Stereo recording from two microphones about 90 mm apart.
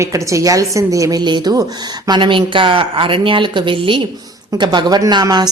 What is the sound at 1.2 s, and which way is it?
A woman's voice, 50° right (ahead or behind).